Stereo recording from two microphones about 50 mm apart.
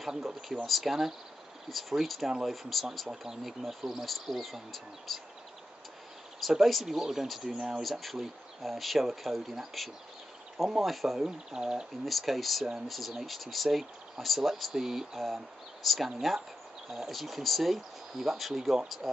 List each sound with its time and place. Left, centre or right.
0.2 s speech: centre
6.4 s speech: centre
11.2 s speech: centre
12.0 s speech: centre